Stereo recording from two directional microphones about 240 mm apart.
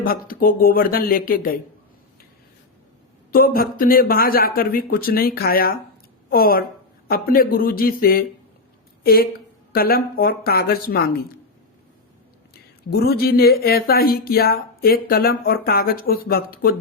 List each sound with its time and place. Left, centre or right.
0.0 s speech: left
3.3 s speech: left
9.7 s speech: left
12.9 s speech: left